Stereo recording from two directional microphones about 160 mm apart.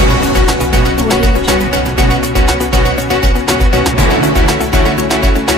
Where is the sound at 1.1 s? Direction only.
Centre (ahead or behind).